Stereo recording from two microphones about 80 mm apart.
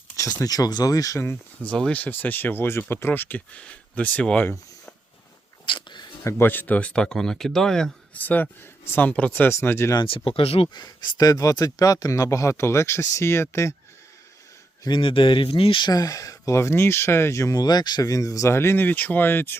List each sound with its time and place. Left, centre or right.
0.4 s speech: left
1.6 s speech: centre
5.6 s a sound: left
6.2 s speech: left; by 7.9 s centre
8.1 s speech: left
9.9 s speech: left
14.8 s speech: left
15.9 s speech: left
17.6 s speech: left